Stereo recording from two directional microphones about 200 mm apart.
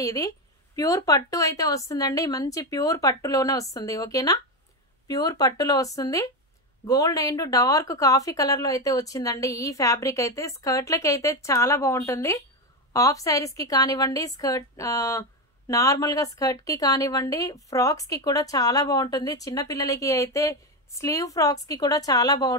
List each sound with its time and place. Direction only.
0.0 s a woman's voice: 15° left (ahead or behind)